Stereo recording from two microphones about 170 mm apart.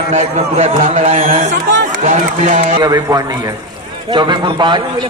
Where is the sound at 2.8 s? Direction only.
25° right (ahead or behind).